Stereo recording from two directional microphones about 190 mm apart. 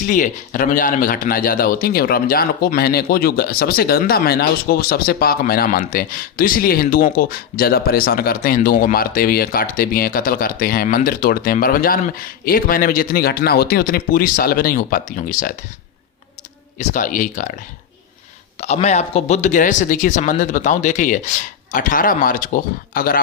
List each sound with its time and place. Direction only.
0.1 s a man's voice: 45° left (ahead or behind)
16.7 s a man's voice: 45° left (ahead or behind)
18.6 s speech: 35° left (ahead or behind)